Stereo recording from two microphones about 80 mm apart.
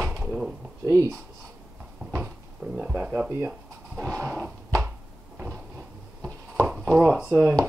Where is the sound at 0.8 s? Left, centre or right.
Right.